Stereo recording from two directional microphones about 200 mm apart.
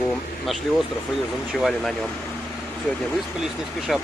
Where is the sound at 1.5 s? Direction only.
Centre (ahead or behind).